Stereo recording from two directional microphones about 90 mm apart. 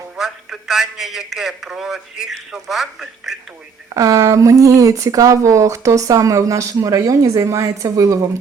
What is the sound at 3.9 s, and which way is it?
Speech, 40° right (ahead or behind).